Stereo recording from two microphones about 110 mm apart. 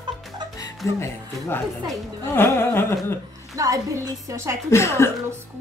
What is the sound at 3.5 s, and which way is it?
A woman's voice, 30° right (ahead or behind).